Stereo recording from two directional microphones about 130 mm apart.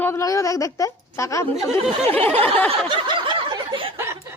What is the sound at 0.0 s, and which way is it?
A woman's voice, 20° left (ahead or behind).